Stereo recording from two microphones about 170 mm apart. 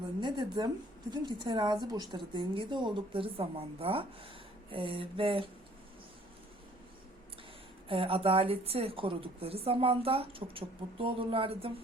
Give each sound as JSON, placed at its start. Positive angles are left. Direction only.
{"t": 0.2, "sound": "a woman's voice", "side_deg": -25}
{"t": 7.9, "sound": "a woman's voice", "side_deg": -30}